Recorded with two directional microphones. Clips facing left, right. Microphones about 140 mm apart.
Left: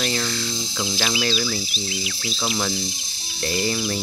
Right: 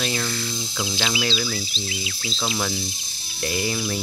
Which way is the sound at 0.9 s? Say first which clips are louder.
Left 1 dB; 20° right (ahead or behind).